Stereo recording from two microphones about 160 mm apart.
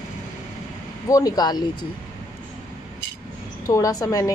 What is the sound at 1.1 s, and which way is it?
Speech, 20° left (ahead or behind).